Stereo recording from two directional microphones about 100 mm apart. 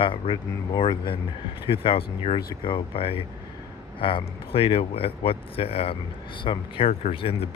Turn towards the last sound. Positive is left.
turn(degrees=75)  # may be behind; listen again after turning